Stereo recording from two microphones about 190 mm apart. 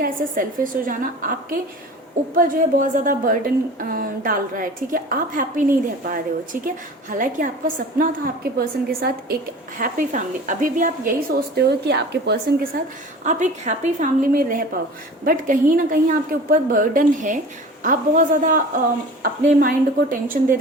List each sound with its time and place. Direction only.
0.0 s a woman's voice: 45° right (ahead or behind)
11.5 s a woman's voice: 60° right (ahead or behind)
13.2 s a woman's voice: 40° right (ahead or behind)